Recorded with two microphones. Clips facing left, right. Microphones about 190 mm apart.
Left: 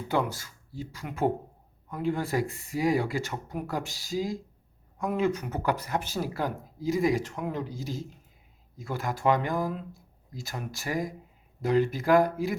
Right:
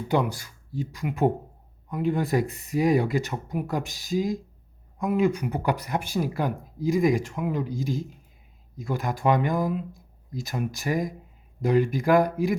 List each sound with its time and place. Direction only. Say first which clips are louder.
0.1 s speech: right 3 dB; 15° right (ahead or behind)